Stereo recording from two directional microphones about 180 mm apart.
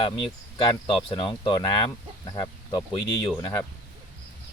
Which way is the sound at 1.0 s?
30° left (ahead or behind).